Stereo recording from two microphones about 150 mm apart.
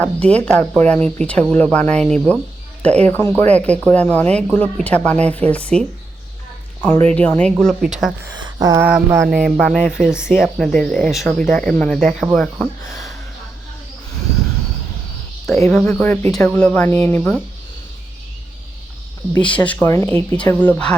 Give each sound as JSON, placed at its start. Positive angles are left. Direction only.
{"t": 0.0, "sound": "speech", "side_deg": 10}
{"t": 6.8, "sound": "speech", "side_deg": 10}
{"t": 8.4, "sound": "a sound", "side_deg": -30}
{"t": 9.2, "sound": "speech", "side_deg": 0}
{"t": 15.7, "sound": "speech", "side_deg": 10}
{"t": 19.4, "sound": "speech", "side_deg": 10}